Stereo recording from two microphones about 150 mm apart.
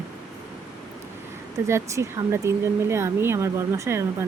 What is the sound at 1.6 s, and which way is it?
Speech, 20° right (ahead or behind).